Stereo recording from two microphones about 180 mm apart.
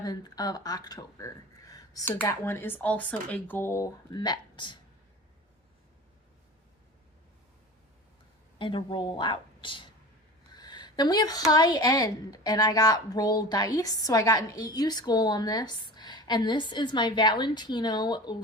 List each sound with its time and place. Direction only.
0.0 s speech: 20° left (ahead or behind)
8.5 s a woman's voice: 30° left (ahead or behind)